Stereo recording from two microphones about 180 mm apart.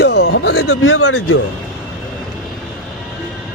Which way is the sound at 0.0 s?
65° left (ahead or behind).